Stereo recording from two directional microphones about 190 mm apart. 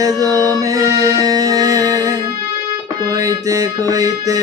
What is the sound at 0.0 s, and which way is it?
Music, 20° right (ahead or behind).